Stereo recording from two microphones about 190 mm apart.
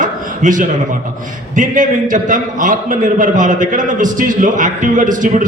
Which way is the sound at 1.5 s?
45° right (ahead or behind).